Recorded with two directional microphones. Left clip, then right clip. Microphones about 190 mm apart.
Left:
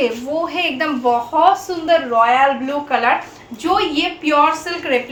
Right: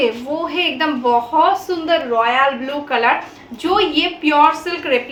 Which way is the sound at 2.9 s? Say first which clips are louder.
Right 1 dB; 15° right (ahead or behind).